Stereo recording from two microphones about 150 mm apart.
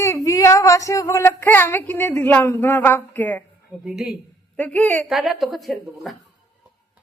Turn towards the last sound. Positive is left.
turn(degrees=0)  # may be behind; listen again after turning